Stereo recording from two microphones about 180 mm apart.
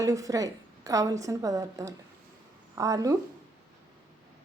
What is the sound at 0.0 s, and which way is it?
A woman's voice, 20° right (ahead or behind).